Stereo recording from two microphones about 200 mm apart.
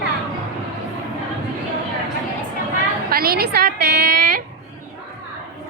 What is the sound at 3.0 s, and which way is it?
A woman's voice, 50° right (ahead or behind).